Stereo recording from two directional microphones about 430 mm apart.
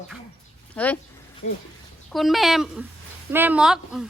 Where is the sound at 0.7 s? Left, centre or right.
Centre.